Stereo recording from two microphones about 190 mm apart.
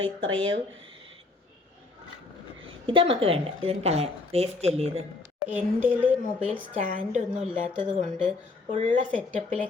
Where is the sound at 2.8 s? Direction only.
30° right (ahead or behind).